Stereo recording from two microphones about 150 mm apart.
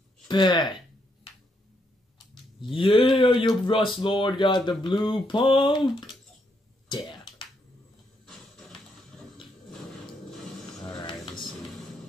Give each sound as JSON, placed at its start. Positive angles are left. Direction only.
{"t": 0.3, "sound": "speech", "side_deg": 30}
{"t": 2.6, "sound": "speech", "side_deg": 35}
{"t": 8.3, "sound": "a sound", "side_deg": 0}